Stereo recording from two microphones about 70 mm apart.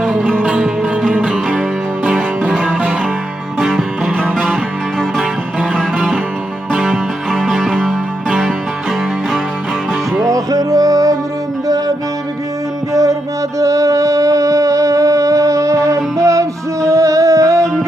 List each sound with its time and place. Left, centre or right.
0.4 s music: centre
2.6 s music: right
3.7 s music: centre
5.7 s music: centre
10.2 s music: right
12.9 s music: right